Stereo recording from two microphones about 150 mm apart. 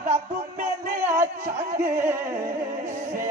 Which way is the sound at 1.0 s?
15° right (ahead or behind).